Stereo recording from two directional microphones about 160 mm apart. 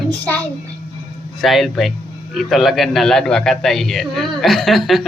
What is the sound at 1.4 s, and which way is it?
A man's voice, centre (ahead or behind).